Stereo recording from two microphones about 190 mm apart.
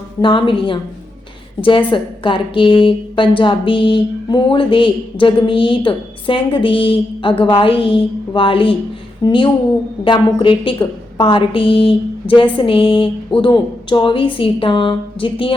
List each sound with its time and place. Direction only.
0.2 s speech: 25° left (ahead or behind)